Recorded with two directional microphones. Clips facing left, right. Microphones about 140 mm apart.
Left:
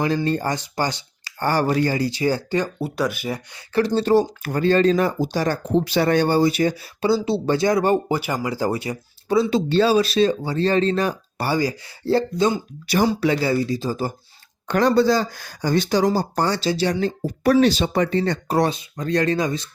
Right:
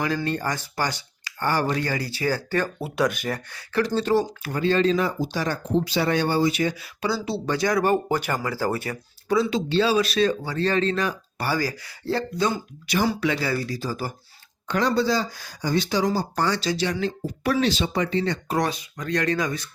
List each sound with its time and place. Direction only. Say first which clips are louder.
0.3 s speech: left 4 dB; 30° left (ahead or behind)
1.4 s speech: left 3 dB; 40° left (ahead or behind)
1.7 s speech: left 6 dB; 30° left (ahead or behind)
2.7 s speech: even; centre (ahead or behind)
3.5 s speech: left 4 dB; 30° left (ahead or behind)
4.4 s speech: left 4 dB; 45° left (ahead or behind)
5.7 s speech: left 4 dB; 55° left (ahead or behind); by 7.9 s 25° left (ahead or behind)
8.0 s speech: left 2 dB; 10° left (ahead or behind)
9.3 s speech: left 3 dB; 30° left (ahead or behind)
14.7 s speech: left 5 dB; 50° left (ahead or behind); by 19.6 s 30° left (ahead or behind)